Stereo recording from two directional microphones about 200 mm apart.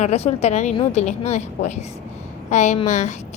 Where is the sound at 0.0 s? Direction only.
30° left (ahead or behind).